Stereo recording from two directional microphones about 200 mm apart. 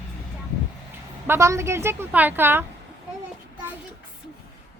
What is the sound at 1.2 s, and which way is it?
A woman's voice, 15° right (ahead or behind).